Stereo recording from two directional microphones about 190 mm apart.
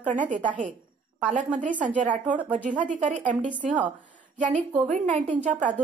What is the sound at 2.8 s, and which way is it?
Speech, 40° right (ahead or behind).